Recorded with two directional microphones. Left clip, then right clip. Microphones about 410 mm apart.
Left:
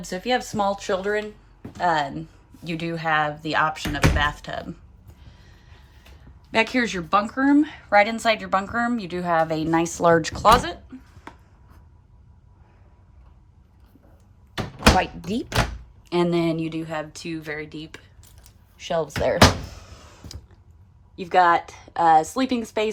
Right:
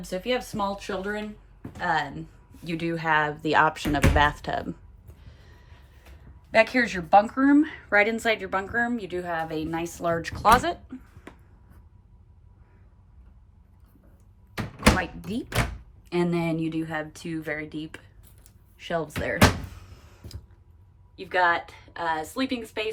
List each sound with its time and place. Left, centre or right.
0.0 s a woman's voice: centre
5.2 s music: centre
6.5 s a woman's voice: centre
14.9 s a woman's voice: centre
18.8 s a sound: centre
21.2 s a woman's voice: centre